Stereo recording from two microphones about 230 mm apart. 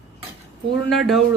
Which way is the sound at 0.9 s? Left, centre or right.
Centre.